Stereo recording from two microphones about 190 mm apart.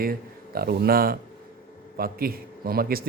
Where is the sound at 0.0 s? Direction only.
50° right (ahead or behind).